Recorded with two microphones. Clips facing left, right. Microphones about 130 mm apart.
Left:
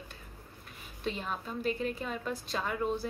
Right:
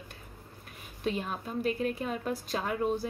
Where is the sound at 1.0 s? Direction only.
45° right (ahead or behind).